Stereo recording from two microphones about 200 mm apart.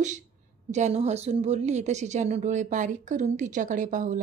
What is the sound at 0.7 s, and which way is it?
A woman's voice, 35° right (ahead or behind).